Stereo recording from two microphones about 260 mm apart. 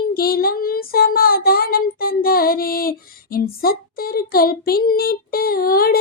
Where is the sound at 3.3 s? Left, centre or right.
Left.